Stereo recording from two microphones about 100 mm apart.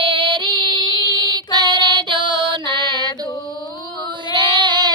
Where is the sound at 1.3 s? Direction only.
45° right (ahead or behind).